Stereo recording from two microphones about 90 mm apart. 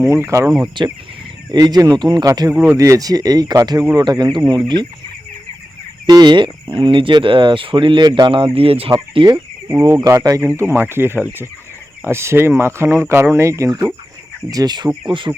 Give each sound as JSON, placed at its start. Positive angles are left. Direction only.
{"t": 0.0, "sound": "speech", "side_deg": -30}
{"t": 0.8, "sound": "speech", "side_deg": -60}
{"t": 1.5, "sound": "speech", "side_deg": -45}
{"t": 2.2, "sound": "speech", "side_deg": -45}
{"t": 6.1, "sound": "speech", "side_deg": -55}
{"t": 8.0, "sound": "speech", "side_deg": -50}
{"t": 8.5, "sound": "speech", "side_deg": -90}
{"t": 9.2, "sound": "speech", "side_deg": -75}
{"t": 9.6, "sound": "speech", "side_deg": -30}
{"t": 10.6, "sound": "speech", "side_deg": -30}
{"t": 14.5, "sound": "speech", "side_deg": -50}
{"t": 15.0, "sound": "speech", "side_deg": -65}